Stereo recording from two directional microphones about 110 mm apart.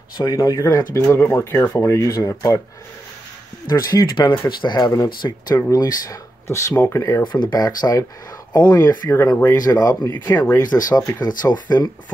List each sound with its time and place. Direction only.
0.2 s speech: 35° left (ahead or behind)
3.6 s speech: 35° left (ahead or behind)
7.3 s speech: 40° left (ahead or behind)